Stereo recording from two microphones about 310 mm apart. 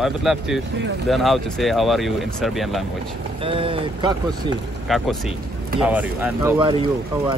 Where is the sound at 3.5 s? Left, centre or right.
Centre.